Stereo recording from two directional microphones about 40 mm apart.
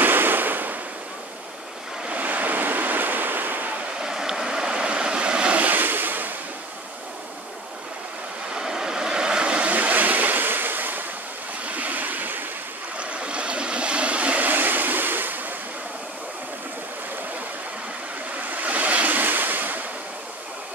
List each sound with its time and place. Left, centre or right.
0.0 s waves: right
2.0 s waves: right
4.0 s vehicle: centre
5.6 s ocean: right
8.5 s vehicle: centre
9.7 s waves: right
11.6 s waves: right
12.9 s waves: right
14.5 s waves: right
18.3 s waves: right